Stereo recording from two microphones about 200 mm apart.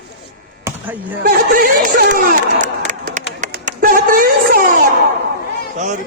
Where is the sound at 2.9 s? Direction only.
40° right (ahead or behind).